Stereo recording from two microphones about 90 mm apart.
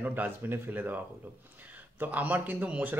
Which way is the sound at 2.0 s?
20° right (ahead or behind).